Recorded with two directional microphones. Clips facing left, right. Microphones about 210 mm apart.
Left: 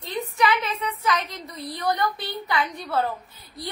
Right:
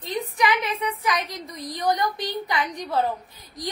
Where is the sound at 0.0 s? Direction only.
15° right (ahead or behind).